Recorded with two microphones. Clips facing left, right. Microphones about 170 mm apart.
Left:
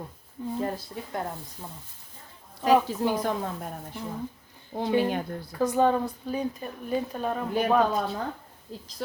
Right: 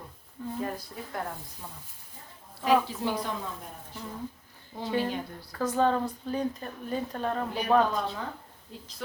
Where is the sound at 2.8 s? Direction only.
50° left (ahead or behind).